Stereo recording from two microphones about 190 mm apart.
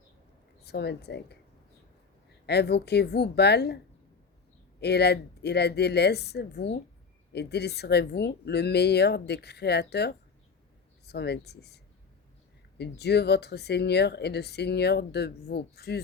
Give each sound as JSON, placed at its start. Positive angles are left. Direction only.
{"t": 0.6, "sound": "speech", "side_deg": 60}
{"t": 2.5, "sound": "speech", "side_deg": 60}
{"t": 4.8, "sound": "speech", "side_deg": 60}